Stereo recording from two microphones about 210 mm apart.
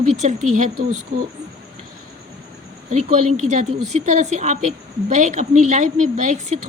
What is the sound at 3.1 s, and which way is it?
A woman's voice, 35° right (ahead or behind).